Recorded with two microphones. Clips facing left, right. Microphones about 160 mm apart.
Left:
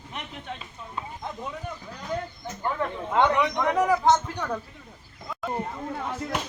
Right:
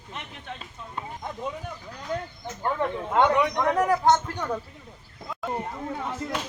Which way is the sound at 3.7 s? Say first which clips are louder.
Left 1 dB; 5° left (ahead or behind).